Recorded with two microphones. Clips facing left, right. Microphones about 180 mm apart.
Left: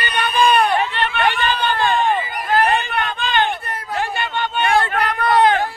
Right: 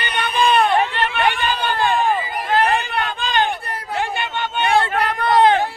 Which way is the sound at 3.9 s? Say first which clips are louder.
Left 1 dB; 15° right (ahead or behind).